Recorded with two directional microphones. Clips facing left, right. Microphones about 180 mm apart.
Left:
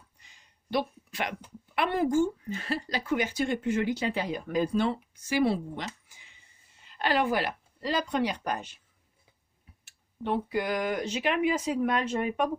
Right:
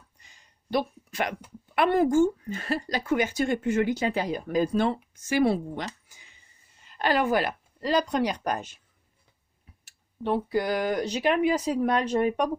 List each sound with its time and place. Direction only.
0.2 s a sound: 45° right (ahead or behind)
1.7 s a woman's voice: 50° right (ahead or behind)
9.8 s speech: 35° right (ahead or behind)